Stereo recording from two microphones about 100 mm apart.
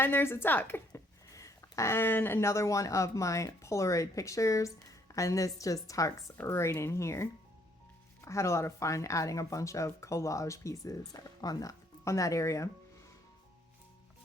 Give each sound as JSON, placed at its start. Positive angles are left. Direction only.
{"t": 0.0, "sound": "a woman's voice", "side_deg": 20}
{"t": 1.3, "sound": "a woman's voice", "side_deg": 35}